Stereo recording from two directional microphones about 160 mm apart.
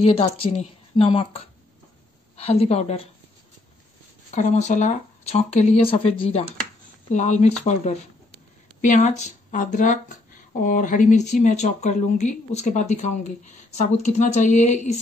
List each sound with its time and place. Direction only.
0.0 s a woman's voice: 40° left (ahead or behind)
4.3 s speech: 50° left (ahead or behind)
7.1 s speech: 50° left (ahead or behind)